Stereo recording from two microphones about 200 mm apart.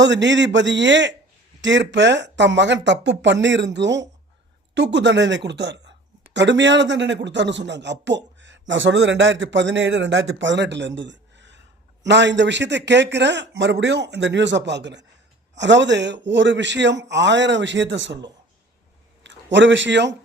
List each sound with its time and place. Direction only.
0.0 s speech: 60° right (ahead or behind)
19.2 s speech: 65° right (ahead or behind)